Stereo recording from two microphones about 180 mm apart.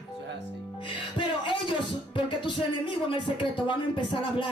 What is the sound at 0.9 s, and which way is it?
Music, 25° left (ahead or behind).